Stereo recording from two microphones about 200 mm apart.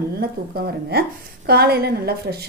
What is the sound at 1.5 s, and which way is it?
Speech, 50° right (ahead or behind).